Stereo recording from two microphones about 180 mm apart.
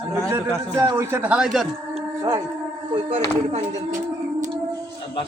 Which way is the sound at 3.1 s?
40° right (ahead or behind).